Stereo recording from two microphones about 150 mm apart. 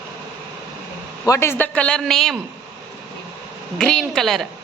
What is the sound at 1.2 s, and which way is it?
A man's voice, 20° left (ahead or behind).